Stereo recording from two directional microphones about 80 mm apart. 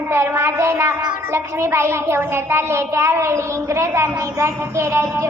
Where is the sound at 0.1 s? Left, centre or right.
Right.